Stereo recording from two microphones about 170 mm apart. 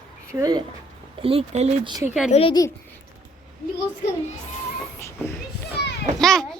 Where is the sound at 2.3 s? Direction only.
35° left (ahead or behind).